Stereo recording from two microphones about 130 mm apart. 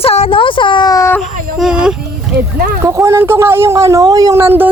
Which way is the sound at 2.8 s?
20° right (ahead or behind).